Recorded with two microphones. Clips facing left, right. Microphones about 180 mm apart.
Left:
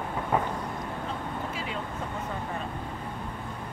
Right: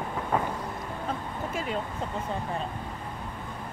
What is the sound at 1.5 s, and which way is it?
Vehicle, 45° right (ahead or behind).